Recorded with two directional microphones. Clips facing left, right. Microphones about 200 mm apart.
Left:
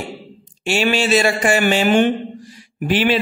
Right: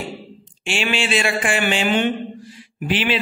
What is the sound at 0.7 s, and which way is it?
A man's voice, 40° left (ahead or behind).